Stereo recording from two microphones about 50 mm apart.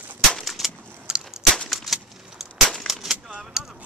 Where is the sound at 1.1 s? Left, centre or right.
Centre.